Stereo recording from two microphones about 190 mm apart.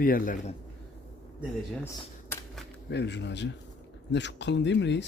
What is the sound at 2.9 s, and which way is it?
Speech, 65° left (ahead or behind).